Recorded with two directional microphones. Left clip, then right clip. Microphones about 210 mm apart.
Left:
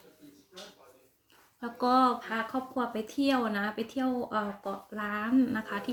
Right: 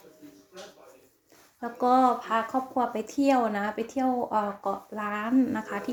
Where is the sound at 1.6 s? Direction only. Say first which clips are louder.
Right 3 dB; 20° left (ahead or behind).